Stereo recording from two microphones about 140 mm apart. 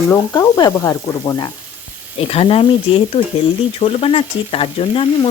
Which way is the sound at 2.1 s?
45° left (ahead or behind).